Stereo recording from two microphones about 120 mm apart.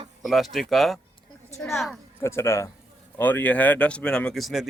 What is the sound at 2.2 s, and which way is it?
Speech, 20° left (ahead or behind).